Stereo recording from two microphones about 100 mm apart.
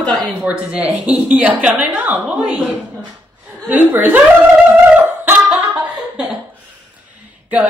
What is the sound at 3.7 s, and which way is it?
Speech, 20° right (ahead or behind).